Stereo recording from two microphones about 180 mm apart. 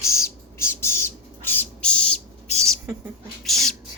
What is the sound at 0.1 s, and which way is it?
Bird, 15° left (ahead or behind).